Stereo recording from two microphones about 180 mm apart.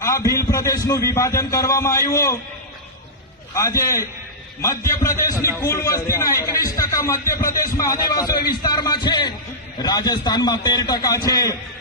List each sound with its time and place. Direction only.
0.0 s a man's voice: 20° left (ahead or behind)
3.5 s a man's voice: 15° left (ahead or behind)